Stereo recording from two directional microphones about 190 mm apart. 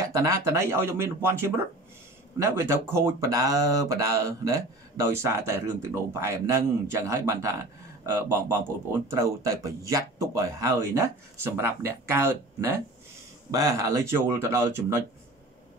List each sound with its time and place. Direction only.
0.0 s speech: 15° right (ahead or behind)